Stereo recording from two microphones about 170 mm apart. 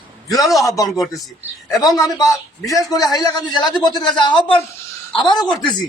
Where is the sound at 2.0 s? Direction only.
20° left (ahead or behind).